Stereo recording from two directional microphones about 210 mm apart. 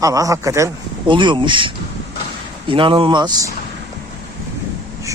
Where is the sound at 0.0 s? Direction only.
15° right (ahead or behind).